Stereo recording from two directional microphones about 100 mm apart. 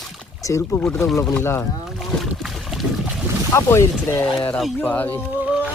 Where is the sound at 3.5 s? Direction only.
25° left (ahead or behind).